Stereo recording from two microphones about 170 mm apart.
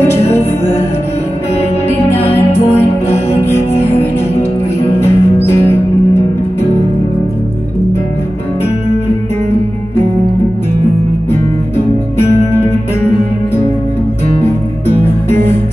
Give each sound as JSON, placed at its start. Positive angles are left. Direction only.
{"t": 0.1, "sound": "music", "side_deg": 15}
{"t": 1.9, "sound": "music", "side_deg": 15}
{"t": 12.3, "sound": "music", "side_deg": 15}